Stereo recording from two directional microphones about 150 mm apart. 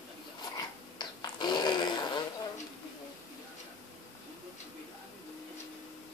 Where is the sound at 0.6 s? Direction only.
30° left (ahead or behind).